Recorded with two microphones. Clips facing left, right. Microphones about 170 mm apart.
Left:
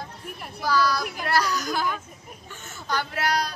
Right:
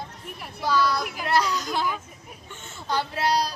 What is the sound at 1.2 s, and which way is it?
Speech, 25° right (ahead or behind).